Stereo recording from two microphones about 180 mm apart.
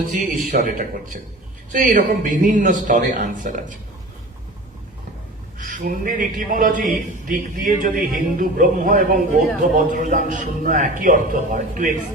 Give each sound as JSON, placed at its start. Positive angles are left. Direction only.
{"t": 0.5, "sound": "a man's voice", "side_deg": -45}
{"t": 5.5, "sound": "a man's voice", "side_deg": -45}